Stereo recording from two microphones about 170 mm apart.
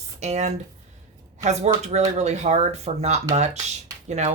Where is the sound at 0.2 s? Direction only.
40° right (ahead or behind).